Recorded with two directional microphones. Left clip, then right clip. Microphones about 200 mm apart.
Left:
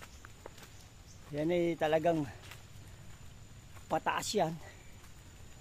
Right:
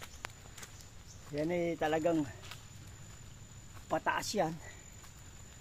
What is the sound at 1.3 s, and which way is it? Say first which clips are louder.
Speech: left 2 dB; 25° left (ahead or behind).